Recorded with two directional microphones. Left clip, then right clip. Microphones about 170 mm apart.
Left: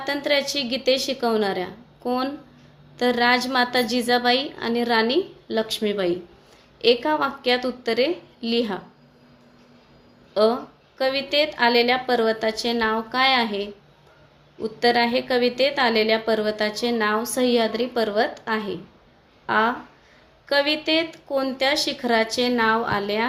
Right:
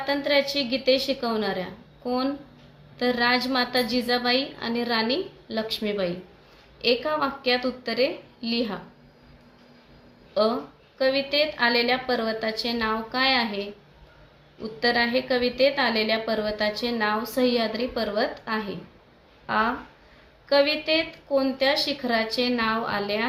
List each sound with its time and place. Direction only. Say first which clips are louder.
0.0 s a woman's voice: left 1 dB; 55° left (ahead or behind)
10.3 s a woman's voice: left 4 dB; 55° left (ahead or behind)